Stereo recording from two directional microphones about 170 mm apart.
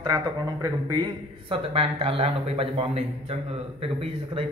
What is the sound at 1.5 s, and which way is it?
A man's voice, 35° right (ahead or behind).